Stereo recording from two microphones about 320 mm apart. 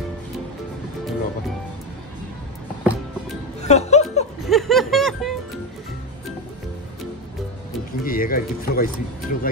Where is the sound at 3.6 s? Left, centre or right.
Centre.